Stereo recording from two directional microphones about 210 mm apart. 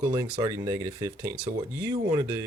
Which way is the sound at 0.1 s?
20° right (ahead or behind).